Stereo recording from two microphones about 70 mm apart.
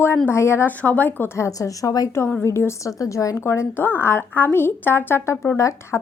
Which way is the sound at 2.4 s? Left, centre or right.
Left.